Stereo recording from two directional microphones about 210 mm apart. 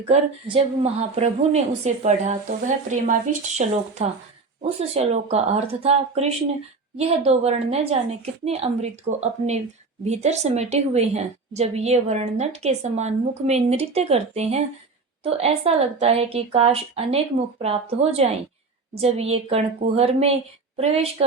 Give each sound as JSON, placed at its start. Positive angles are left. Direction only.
{"t": 0.1, "sound": "a woman's voice", "side_deg": -25}